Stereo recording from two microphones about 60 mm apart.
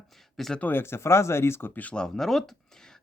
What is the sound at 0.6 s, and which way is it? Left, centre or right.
Speech, left.